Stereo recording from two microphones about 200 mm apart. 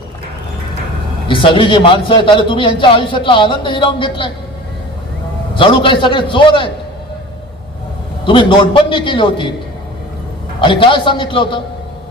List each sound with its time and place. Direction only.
1.3 s a man's voice: 25° left (ahead or behind)
5.5 s a man's voice: 25° left (ahead or behind)
8.3 s a man's voice: 25° left (ahead or behind)
10.6 s a man's voice: 25° left (ahead or behind)